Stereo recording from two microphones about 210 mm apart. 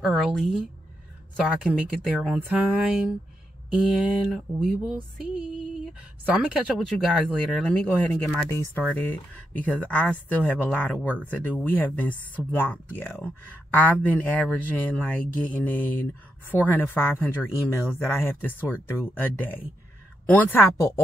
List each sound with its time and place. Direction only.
0.0 s speech: centre (ahead or behind)